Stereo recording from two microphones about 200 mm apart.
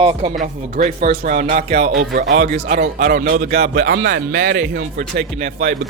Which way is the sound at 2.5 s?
50° right (ahead or behind).